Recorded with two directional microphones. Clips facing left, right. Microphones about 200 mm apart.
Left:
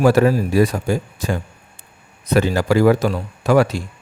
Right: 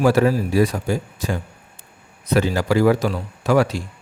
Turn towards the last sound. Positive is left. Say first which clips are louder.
# left 2 dB
turn(degrees=55)  # may be behind; listen again after turning